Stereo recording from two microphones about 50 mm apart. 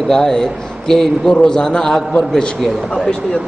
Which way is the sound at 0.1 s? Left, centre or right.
Centre.